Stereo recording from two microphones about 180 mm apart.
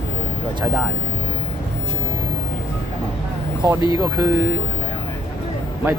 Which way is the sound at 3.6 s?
15° right (ahead or behind).